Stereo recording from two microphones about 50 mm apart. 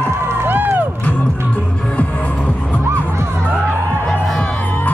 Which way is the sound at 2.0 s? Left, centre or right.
Left.